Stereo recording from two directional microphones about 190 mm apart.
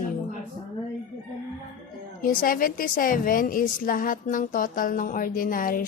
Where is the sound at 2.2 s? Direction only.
45° left (ahead or behind).